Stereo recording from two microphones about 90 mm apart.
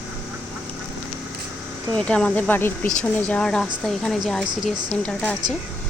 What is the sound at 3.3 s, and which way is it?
Speech, 5° left (ahead or behind).